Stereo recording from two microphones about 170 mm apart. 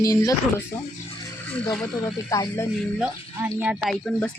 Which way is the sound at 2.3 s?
20° left (ahead or behind).